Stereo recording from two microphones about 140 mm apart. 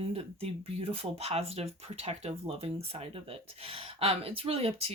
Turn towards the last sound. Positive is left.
turn(degrees=-45)  # may be behind; listen again after turning